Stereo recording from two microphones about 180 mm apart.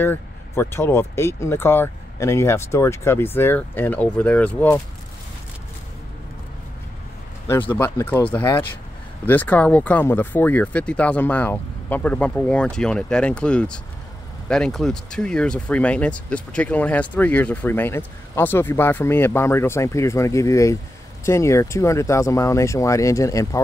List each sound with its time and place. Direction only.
0.0 s speech: 10° left (ahead or behind)
7.7 s speech: 10° left (ahead or behind)